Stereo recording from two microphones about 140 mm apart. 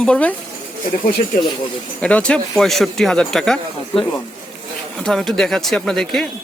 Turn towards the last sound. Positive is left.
turn(degrees=5)  # may be behind; listen again after turning